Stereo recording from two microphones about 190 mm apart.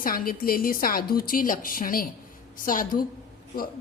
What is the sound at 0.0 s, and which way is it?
A woman's voice, 50° left (ahead or behind).